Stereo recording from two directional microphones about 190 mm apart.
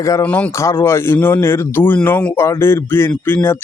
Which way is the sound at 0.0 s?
15° left (ahead or behind).